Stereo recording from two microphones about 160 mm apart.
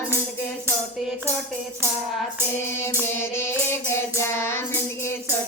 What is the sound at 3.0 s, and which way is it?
Child singing, 15° left (ahead or behind).